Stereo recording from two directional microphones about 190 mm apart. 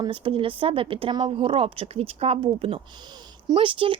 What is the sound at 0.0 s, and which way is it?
Speech, 25° right (ahead or behind).